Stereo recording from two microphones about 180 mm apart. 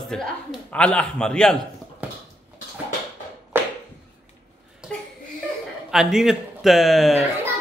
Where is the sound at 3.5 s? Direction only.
10° right (ahead or behind).